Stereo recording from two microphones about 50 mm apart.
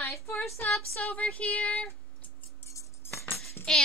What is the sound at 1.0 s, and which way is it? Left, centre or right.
Speech, left.